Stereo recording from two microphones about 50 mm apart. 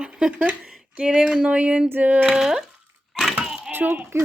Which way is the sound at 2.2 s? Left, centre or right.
Centre.